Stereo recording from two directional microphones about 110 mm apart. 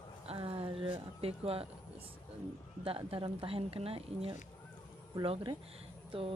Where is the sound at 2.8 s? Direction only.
60° right (ahead or behind).